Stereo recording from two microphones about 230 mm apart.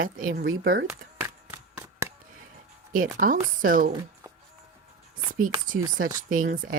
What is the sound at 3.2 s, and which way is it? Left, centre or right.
Speech, right.